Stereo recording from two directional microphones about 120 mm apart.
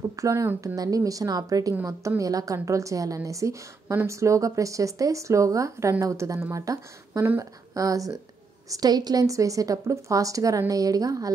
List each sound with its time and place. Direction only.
0.1 s a woman's voice: 25° right (ahead or behind)